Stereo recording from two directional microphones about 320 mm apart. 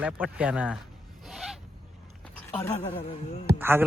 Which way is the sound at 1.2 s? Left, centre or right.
Centre.